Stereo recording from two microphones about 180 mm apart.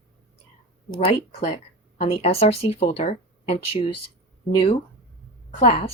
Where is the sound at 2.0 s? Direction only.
35° left (ahead or behind).